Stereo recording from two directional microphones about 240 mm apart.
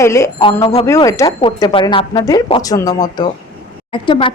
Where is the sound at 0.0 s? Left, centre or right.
Centre.